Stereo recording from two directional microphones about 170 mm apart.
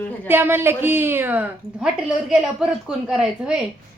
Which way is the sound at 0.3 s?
15° right (ahead or behind).